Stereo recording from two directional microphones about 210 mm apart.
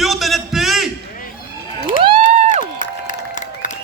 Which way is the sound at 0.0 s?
Centre (ahead or behind).